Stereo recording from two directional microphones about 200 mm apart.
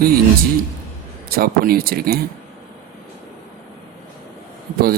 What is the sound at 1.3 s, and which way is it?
Speech, 50° right (ahead or behind).